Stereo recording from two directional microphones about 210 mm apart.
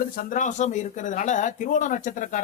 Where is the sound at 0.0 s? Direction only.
40° left (ahead or behind).